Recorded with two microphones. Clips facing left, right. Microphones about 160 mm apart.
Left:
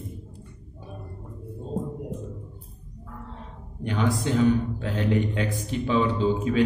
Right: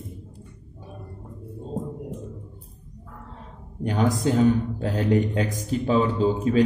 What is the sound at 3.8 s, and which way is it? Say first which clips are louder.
A man's voice: right 3 dB; 40° right (ahead or behind).